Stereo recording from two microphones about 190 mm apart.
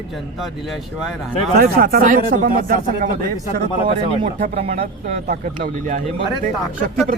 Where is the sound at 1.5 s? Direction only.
55° right (ahead or behind).